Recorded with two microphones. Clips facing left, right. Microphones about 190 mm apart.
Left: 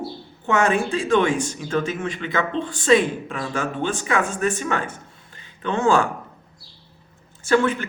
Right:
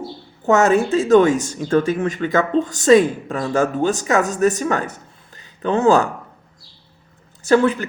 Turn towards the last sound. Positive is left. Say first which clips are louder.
# right 4 dB
turn(degrees=-40)  # may be behind; listen again after turning